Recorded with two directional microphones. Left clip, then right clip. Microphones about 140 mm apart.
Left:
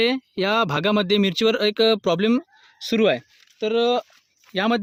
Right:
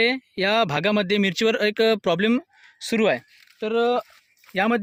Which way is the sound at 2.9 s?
65° left (ahead or behind).